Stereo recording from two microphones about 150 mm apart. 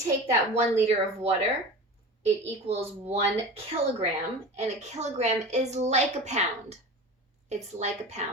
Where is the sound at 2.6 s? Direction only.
45° right (ahead or behind).